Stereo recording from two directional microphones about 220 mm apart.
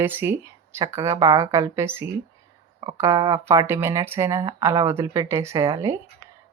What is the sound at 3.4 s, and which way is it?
Speech, 10° right (ahead or behind).